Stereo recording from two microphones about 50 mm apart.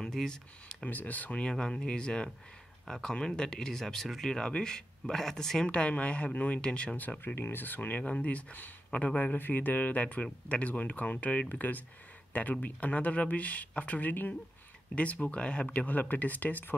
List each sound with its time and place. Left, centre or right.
0.0 s speech: centre
0.8 s speech: left
1.4 s speech: centre
5.7 s speech: left
7.0 s speech: left
7.3 s speech: left
8.0 s speech: left